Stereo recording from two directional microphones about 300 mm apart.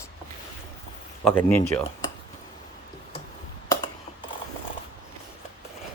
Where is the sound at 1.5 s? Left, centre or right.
Centre.